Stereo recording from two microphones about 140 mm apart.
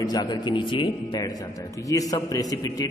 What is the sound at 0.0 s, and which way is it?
A man's voice, 30° left (ahead or behind).